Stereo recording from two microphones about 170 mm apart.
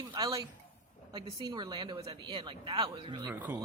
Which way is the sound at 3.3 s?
10° right (ahead or behind).